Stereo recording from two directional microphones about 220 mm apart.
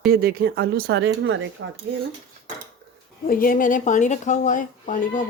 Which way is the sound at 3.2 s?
40° left (ahead or behind).